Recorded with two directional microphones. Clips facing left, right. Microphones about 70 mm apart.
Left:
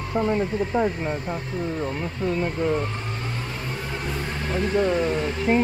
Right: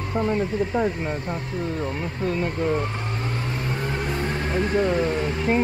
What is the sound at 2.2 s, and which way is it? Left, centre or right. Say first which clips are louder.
Speech: even; centre.